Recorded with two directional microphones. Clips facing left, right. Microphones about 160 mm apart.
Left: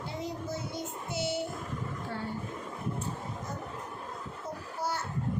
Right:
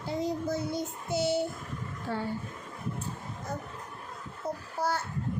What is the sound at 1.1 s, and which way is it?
Child singing, 35° right (ahead or behind).